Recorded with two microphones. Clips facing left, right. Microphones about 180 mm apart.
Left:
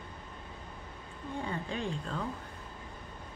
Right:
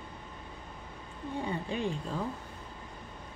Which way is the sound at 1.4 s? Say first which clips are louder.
Right 3 dB; 15° right (ahead or behind).